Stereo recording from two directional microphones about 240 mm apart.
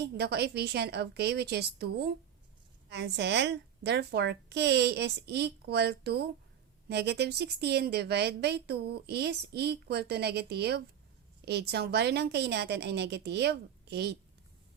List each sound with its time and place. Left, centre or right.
0.0 s speech: right